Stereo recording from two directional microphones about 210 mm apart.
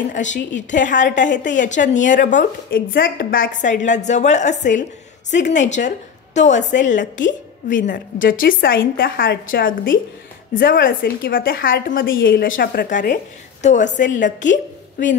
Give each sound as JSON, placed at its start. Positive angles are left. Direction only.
{"t": 0.1, "sound": "a woman's voice", "side_deg": 35}